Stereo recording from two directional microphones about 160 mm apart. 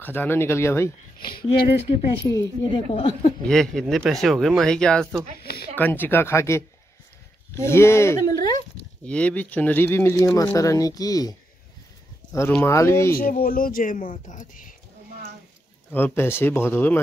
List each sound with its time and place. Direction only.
0.0 s speech: 10° left (ahead or behind)
1.7 s a woman's voice: 35° left (ahead or behind)
2.2 s a woman's voice: 20° left (ahead or behind)
2.7 s a woman's voice: 35° left (ahead or behind)
3.4 s speech: 5° left (ahead or behind)
5.4 s speech: 75° left (ahead or behind)
5.8 s speech: 10° left (ahead or behind)
13.1 s speech: 65° left (ahead or behind)
15.9 s speech: 15° left (ahead or behind)